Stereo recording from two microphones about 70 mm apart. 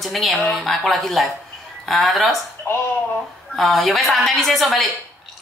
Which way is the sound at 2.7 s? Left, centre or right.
Left.